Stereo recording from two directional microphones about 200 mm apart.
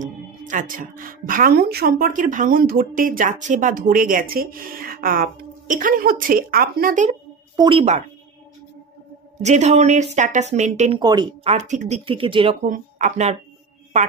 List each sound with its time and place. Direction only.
0.0 s a woman's voice: 40° right (ahead or behind)
7.1 s a sound: 25° right (ahead or behind)
9.4 s a woman's voice: 35° right (ahead or behind)
11.0 s speech: 20° right (ahead or behind)
11.5 s speech: 35° right (ahead or behind)
12.6 s speech: 40° right (ahead or behind)